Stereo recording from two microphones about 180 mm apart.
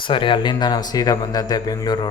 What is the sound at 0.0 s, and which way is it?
Speech, 25° left (ahead or behind).